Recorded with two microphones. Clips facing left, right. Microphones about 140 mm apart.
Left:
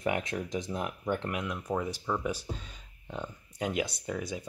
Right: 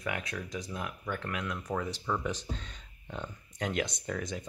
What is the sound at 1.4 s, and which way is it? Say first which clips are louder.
Speech: left 2 dB; 10° left (ahead or behind).